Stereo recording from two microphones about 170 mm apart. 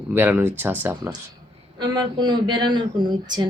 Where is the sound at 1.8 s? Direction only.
25° right (ahead or behind).